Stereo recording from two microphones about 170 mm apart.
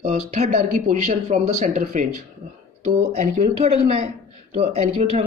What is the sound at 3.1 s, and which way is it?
Speech, 40° right (ahead or behind).